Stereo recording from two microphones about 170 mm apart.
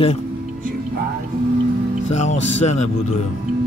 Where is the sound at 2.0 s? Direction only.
40° left (ahead or behind).